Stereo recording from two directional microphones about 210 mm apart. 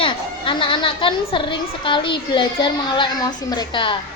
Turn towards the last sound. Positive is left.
turn(degrees=20)  # may be behind; listen again after turning